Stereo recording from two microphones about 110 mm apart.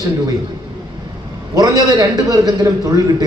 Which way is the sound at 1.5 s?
35° right (ahead or behind).